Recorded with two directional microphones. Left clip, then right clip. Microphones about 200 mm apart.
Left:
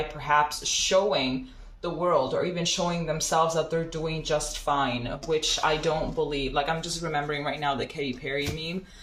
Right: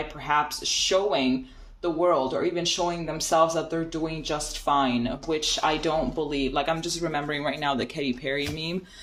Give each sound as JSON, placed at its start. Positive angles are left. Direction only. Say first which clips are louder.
{"t": 0.3, "sound": "speech", "louder": "left 1 dB", "side_deg": -50}